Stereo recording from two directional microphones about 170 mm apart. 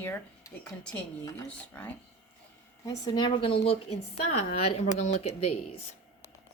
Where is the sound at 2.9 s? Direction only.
25° left (ahead or behind).